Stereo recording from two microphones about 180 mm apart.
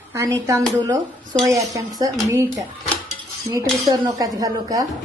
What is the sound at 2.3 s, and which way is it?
A woman's voice, 15° right (ahead or behind).